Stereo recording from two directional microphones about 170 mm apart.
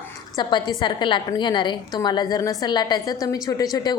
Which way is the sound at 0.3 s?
25° left (ahead or behind).